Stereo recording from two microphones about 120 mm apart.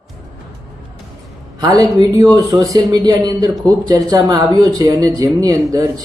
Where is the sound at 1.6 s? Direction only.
30° right (ahead or behind).